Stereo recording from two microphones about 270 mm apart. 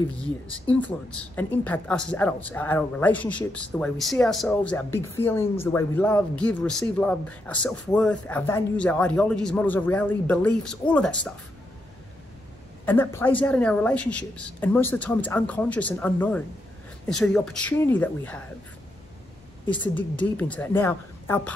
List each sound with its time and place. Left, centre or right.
0.7 s speech: centre
12.8 s speech: centre
19.7 s speech: centre